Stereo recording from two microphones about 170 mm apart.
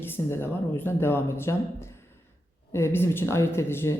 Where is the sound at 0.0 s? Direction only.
15° left (ahead or behind).